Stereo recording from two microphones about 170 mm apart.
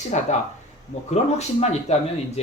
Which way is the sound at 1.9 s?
40° left (ahead or behind).